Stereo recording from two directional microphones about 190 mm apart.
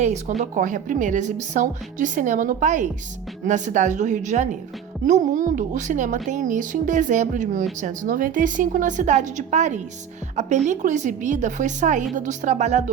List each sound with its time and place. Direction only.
0.0 s a woman's voice: 35° right (ahead or behind)